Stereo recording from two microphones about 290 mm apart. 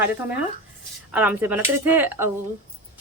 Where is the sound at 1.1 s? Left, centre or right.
Centre.